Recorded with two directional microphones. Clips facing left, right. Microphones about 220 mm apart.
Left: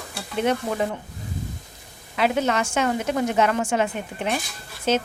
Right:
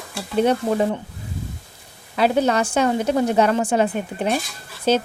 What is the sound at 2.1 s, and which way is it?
A woman's voice, 35° right (ahead or behind).